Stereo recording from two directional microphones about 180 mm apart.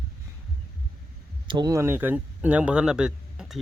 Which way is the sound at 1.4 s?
25° right (ahead or behind).